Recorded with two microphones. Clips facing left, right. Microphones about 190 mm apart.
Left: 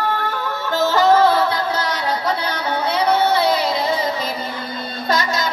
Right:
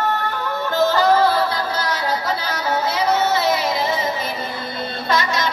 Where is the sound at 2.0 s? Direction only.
10° right (ahead or behind).